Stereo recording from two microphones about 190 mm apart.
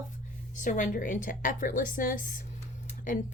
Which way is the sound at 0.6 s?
40° left (ahead or behind).